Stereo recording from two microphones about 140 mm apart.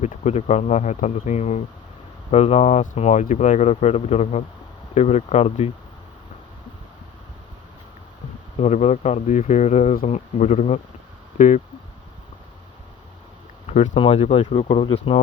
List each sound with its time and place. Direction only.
0.0 s speech: 55° left (ahead or behind)
8.5 s speech: 55° left (ahead or behind)
10.1 s speech: 55° left (ahead or behind)
13.7 s a sound: 50° left (ahead or behind)
13.9 s speech: 40° left (ahead or behind)